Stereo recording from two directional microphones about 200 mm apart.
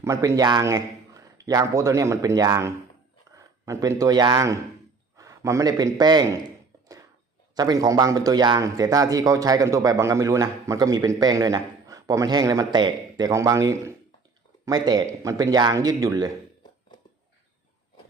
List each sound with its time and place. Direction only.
0.0 s a man's voice: 15° right (ahead or behind)
7.5 s a man's voice: 20° right (ahead or behind)